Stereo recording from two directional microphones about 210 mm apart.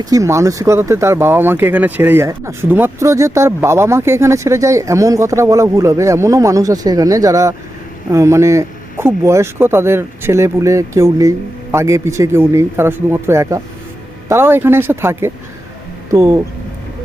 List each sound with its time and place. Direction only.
0.0 s speech: 15° right (ahead or behind)